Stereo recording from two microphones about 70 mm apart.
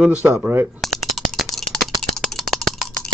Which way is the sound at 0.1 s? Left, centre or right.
Centre.